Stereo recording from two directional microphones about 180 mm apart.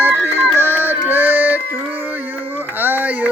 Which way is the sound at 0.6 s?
10° right (ahead or behind).